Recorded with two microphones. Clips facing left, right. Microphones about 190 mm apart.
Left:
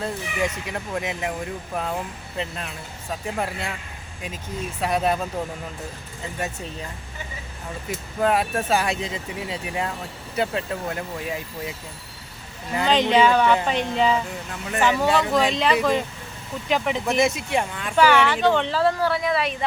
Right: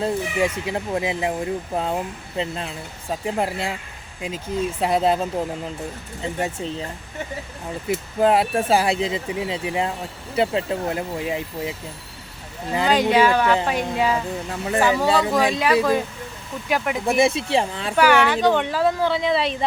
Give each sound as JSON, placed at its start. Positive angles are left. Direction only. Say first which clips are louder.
{"t": 0.0, "sound": "speech", "louder": "right 5 dB", "side_deg": -30}
{"t": 4.8, "sound": "speech", "louder": "right 2 dB", "side_deg": -25}
{"t": 6.4, "sound": "speech", "louder": "right 4 dB", "side_deg": -25}
{"t": 8.2, "sound": "speech", "louder": "right 3 dB", "side_deg": -25}
{"t": 12.7, "sound": "speech", "louder": "right 1 dB", "side_deg": -10}
{"t": 17.2, "sound": "speech", "louder": "right 4 dB", "side_deg": -30}
{"t": 17.9, "sound": "speech", "louder": "right 1 dB", "side_deg": -10}